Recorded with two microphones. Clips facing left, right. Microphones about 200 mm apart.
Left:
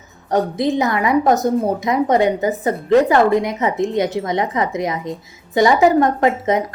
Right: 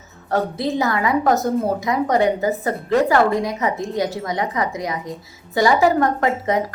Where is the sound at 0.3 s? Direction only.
15° left (ahead or behind).